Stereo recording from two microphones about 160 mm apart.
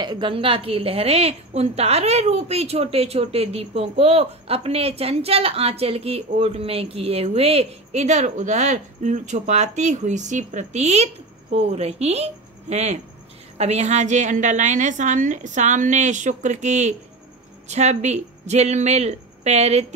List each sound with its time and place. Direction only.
0.0 s a woman's voice: 30° right (ahead or behind)